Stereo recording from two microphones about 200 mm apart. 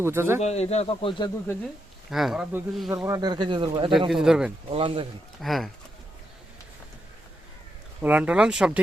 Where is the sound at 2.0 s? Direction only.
Centre (ahead or behind).